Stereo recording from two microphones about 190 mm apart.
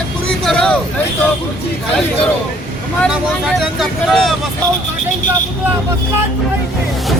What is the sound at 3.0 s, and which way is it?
Speech, centre (ahead or behind).